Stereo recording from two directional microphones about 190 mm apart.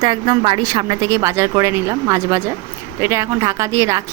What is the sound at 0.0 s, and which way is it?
A woman's voice, 25° right (ahead or behind).